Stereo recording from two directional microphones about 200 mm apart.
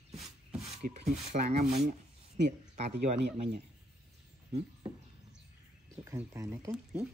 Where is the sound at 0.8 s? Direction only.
35° right (ahead or behind).